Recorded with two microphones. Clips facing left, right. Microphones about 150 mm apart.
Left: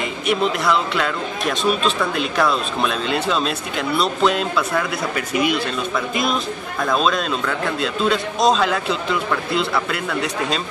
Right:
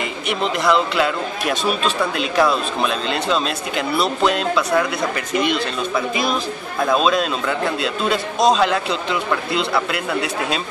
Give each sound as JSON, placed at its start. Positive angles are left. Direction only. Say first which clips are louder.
{"t": 0.3, "sound": "speech", "louder": "even", "side_deg": 0}